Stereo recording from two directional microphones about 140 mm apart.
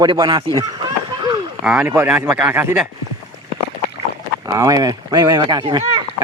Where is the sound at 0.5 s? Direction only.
30° right (ahead or behind).